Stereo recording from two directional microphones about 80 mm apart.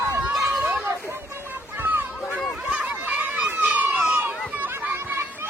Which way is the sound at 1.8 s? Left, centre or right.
Right.